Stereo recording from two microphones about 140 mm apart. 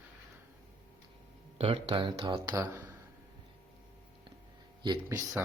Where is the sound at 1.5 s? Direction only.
40° right (ahead or behind).